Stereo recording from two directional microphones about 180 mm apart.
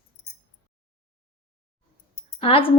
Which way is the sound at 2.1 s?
30° left (ahead or behind).